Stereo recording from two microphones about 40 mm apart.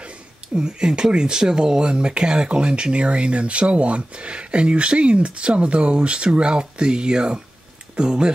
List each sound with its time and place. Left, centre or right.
0.6 s speech: centre